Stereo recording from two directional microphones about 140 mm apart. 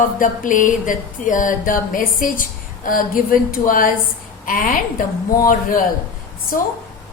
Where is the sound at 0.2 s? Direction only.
70° left (ahead or behind).